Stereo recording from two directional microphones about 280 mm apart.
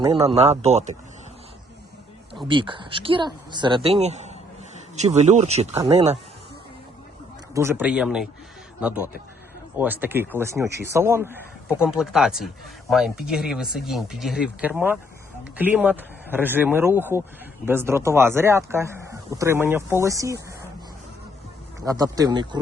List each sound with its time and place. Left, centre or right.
0.0 s speech: centre
2.5 s speech: centre
7.5 s speech: centre
21.8 s speech: centre